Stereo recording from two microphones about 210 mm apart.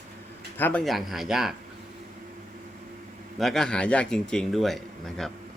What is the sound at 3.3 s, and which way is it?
Speech, centre (ahead or behind).